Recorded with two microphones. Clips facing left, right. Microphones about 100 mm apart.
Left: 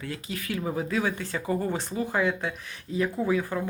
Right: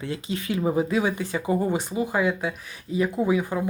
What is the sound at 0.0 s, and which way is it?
Speech, 25° right (ahead or behind).